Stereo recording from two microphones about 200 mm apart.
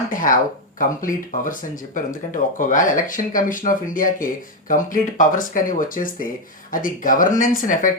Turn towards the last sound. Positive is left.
turn(degrees=40)  # may be behind; listen again after turning